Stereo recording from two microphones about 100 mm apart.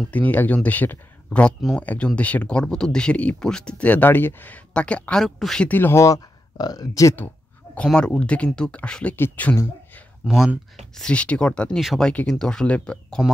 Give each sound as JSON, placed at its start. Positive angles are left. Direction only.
{"t": 0.1, "sound": "speech", "side_deg": 15}
{"t": 5.7, "sound": "speech", "side_deg": 20}
{"t": 7.7, "sound": "speech", "side_deg": 10}
{"t": 10.2, "sound": "speech", "side_deg": 0}
{"t": 11.0, "sound": "speech", "side_deg": 10}
{"t": 11.8, "sound": "speech", "side_deg": 0}
{"t": 12.1, "sound": "speech", "side_deg": 10}